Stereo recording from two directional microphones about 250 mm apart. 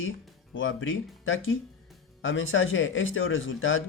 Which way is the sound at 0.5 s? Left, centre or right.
Left.